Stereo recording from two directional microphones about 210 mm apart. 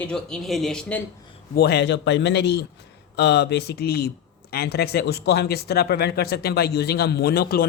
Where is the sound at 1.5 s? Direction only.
50° left (ahead or behind).